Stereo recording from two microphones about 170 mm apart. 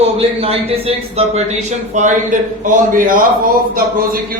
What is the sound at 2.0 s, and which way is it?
A man's voice, 50° right (ahead or behind).